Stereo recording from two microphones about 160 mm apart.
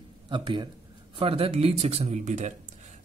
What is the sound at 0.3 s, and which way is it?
A man's voice, 30° right (ahead or behind).